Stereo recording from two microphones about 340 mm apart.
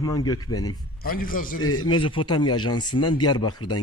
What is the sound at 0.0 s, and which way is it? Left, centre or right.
Speech, centre.